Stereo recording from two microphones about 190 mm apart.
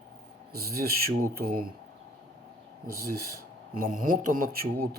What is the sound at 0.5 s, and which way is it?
Speech, 50° right (ahead or behind).